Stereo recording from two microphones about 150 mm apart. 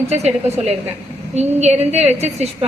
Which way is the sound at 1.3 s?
45° right (ahead or behind).